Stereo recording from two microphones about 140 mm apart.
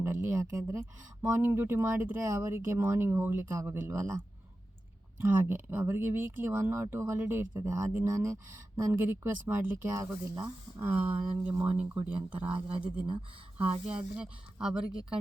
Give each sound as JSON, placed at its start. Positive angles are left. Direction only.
{"t": 0.0, "sound": "speech", "side_deg": -20}
{"t": 5.2, "sound": "speech", "side_deg": -15}
{"t": 10.8, "sound": "speech", "side_deg": -10}
{"t": 13.7, "sound": "speech", "side_deg": -10}